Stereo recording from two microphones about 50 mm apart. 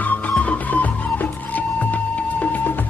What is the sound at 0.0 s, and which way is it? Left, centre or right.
Music, left.